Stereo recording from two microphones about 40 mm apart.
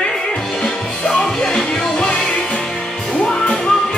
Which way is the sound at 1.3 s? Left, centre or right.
Centre.